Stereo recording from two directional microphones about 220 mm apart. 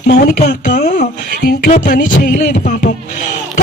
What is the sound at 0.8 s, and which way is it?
Music, 35° left (ahead or behind).